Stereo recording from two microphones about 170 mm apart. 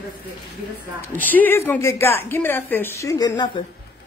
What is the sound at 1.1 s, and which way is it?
A woman's voice, 10° left (ahead or behind).